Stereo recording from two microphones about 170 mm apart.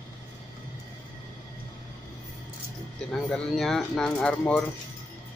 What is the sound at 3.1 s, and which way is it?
A man's voice, centre (ahead or behind).